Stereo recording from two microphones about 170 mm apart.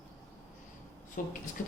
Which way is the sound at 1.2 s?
50° left (ahead or behind).